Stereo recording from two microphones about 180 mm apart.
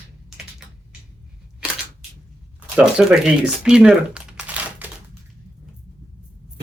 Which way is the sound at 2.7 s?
5° right (ahead or behind).